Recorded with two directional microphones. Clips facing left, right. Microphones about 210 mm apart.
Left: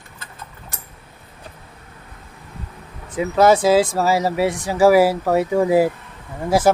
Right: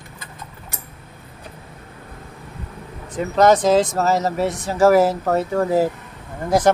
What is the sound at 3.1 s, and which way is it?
Speech, 5° left (ahead or behind).